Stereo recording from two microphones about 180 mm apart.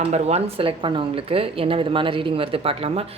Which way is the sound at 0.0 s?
35° right (ahead or behind).